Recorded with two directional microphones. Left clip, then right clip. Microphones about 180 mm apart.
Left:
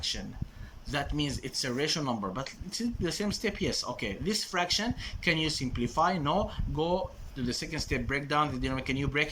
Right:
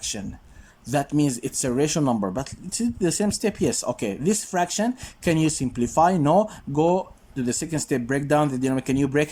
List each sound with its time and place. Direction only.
0.9 s speech: 35° right (ahead or behind)